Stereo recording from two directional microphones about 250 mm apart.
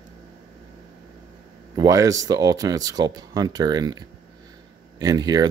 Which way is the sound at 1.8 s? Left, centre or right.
Centre.